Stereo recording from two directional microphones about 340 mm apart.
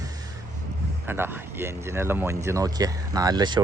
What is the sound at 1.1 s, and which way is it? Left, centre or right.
Speech, centre.